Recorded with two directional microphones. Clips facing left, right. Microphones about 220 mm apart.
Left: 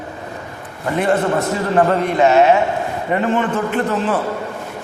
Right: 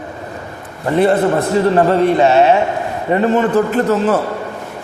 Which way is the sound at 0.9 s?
35° right (ahead or behind).